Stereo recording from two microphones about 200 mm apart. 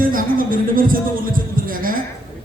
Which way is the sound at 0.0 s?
45° right (ahead or behind).